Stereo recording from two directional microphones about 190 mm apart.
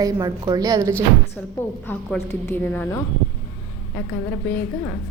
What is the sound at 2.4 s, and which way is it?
Speech, 10° left (ahead or behind).